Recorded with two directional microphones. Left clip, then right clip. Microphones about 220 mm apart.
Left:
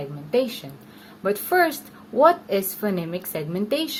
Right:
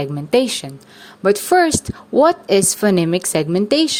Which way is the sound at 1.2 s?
40° right (ahead or behind).